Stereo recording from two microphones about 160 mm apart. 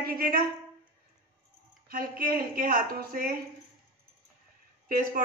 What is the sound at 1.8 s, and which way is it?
A woman's voice, 65° right (ahead or behind).